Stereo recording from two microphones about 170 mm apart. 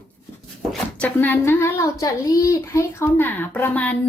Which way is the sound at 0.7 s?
5° left (ahead or behind).